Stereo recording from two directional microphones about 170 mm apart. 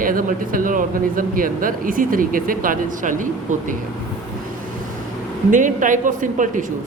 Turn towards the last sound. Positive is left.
turn(degrees=-50)  # may be behind; listen again after turning